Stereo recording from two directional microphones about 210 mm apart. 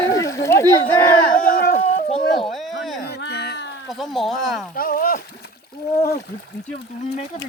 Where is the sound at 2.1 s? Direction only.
25° left (ahead or behind).